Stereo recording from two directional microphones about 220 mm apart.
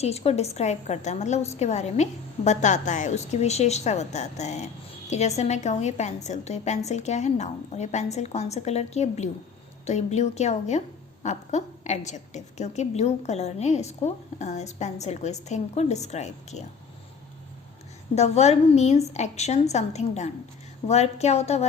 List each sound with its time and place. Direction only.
0.0 s a woman's voice: 30° left (ahead or behind)
18.1 s a woman's voice: 30° left (ahead or behind)